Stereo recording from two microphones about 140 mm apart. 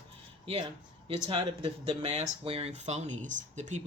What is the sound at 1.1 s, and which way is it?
Speech, 40° right (ahead or behind).